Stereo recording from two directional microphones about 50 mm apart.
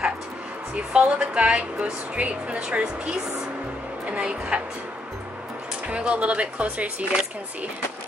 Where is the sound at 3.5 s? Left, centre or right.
Right.